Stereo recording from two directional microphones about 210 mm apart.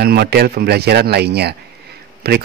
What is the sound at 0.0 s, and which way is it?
A man's voice, 50° right (ahead or behind).